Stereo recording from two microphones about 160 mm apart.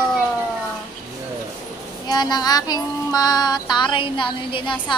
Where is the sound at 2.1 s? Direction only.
25° left (ahead or behind).